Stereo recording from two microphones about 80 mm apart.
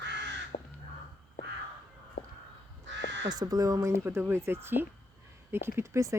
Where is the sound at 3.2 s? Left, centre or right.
Right.